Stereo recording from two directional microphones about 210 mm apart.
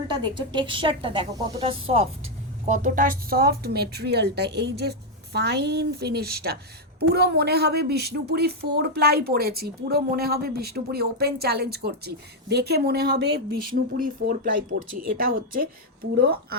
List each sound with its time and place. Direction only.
0.2 s a woman's voice: 20° right (ahead or behind); by 16.6 s 45° right (ahead or behind)